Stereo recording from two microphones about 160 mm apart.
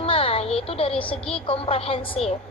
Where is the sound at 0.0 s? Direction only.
35° left (ahead or behind).